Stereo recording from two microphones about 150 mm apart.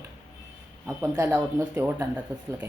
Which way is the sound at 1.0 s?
15° right (ahead or behind).